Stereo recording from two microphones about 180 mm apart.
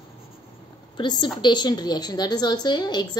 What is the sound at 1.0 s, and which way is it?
A woman's voice, 25° left (ahead or behind).